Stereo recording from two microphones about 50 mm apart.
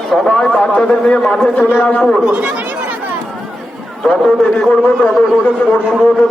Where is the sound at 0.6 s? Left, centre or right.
Left.